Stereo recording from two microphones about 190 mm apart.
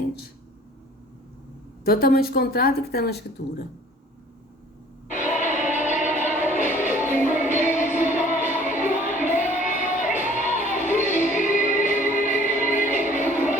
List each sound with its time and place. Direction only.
1.8 s speech: 55° left (ahead or behind)
5.0 s music: 40° left (ahead or behind)